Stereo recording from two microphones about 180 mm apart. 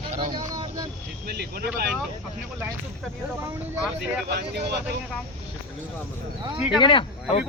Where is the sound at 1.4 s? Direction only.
65° right (ahead or behind).